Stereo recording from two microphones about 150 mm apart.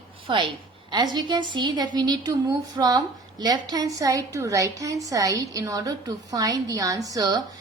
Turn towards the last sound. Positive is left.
turn(degrees=-25)  # may be behind; listen again after turning